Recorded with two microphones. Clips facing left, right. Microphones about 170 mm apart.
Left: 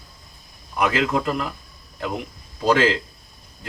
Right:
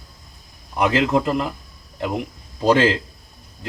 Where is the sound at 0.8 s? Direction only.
25° right (ahead or behind).